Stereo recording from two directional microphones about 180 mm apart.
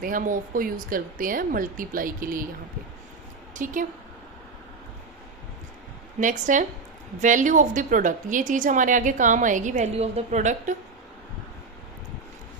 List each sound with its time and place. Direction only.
0.0 s a woman's voice: 50° right (ahead or behind)
3.5 s a woman's voice: 45° right (ahead or behind)
6.1 s a woman's voice: 45° right (ahead or behind)